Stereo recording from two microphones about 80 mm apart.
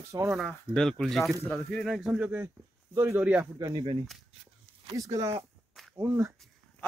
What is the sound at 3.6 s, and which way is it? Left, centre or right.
Speech, right.